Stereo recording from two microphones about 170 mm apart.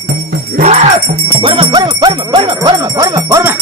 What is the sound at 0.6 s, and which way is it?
Music, 40° right (ahead or behind).